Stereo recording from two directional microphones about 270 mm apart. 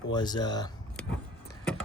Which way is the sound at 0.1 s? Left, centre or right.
Centre.